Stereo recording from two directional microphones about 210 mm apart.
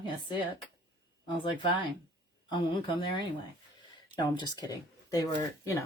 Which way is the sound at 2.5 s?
20° left (ahead or behind).